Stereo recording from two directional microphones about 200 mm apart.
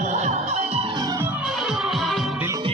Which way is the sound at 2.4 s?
15° right (ahead or behind).